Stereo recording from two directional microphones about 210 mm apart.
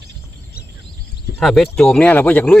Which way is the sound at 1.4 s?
Centre (ahead or behind).